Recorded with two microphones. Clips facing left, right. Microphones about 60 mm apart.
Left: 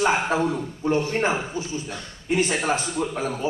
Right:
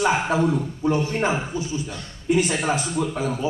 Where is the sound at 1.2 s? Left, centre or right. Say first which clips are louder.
Right 1 dB; left.